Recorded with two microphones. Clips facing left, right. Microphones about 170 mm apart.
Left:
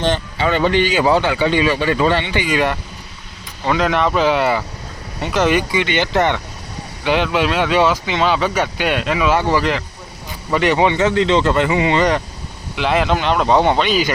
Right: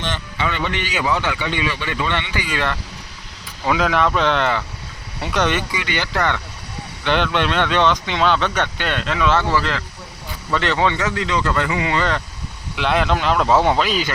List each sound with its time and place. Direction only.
0.0 s a man's voice: 35° left (ahead or behind)
2.4 s speech: 15° left (ahead or behind)
3.6 s speech: 5° right (ahead or behind)
5.7 s speech: 25° left (ahead or behind)
7.0 s speech: 5° left (ahead or behind)
12.7 s speech: centre (ahead or behind)